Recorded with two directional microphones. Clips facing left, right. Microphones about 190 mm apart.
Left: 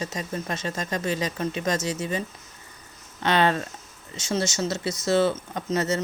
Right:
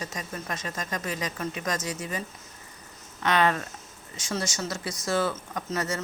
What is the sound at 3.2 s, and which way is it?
Speech, 30° left (ahead or behind).